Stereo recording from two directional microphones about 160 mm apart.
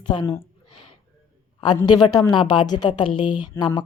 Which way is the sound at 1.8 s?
25° left (ahead or behind).